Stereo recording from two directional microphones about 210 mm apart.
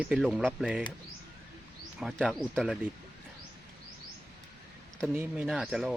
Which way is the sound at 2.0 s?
Centre (ahead or behind).